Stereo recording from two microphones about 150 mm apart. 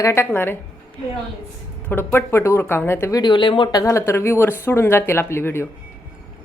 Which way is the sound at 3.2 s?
30° left (ahead or behind).